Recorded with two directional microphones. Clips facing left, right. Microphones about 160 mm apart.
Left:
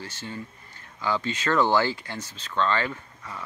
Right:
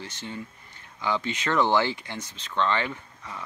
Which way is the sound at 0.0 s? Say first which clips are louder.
Even; 20° right (ahead or behind).